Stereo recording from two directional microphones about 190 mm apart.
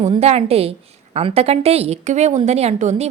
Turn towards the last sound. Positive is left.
turn(degrees=-35)  # may be behind; listen again after turning